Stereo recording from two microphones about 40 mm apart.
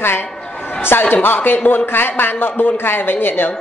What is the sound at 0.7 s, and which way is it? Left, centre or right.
A man's voice, left.